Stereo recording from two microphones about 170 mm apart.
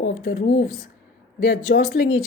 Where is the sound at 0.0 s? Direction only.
65° left (ahead or behind).